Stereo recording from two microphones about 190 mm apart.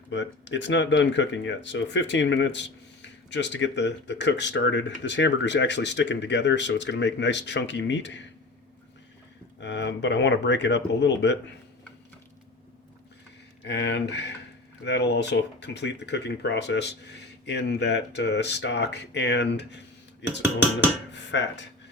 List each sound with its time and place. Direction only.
0.1 s speech: 70° left (ahead or behind)
9.6 s speech: 65° left (ahead or behind)
13.7 s speech: 65° left (ahead or behind)
21.1 s speech: 70° left (ahead or behind)